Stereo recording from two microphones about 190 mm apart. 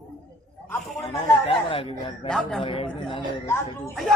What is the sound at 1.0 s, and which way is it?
A man's voice, 30° left (ahead or behind).